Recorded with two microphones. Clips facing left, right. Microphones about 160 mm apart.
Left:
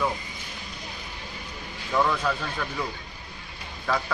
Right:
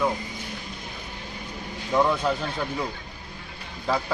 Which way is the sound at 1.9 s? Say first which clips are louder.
Right 2 dB; 20° right (ahead or behind).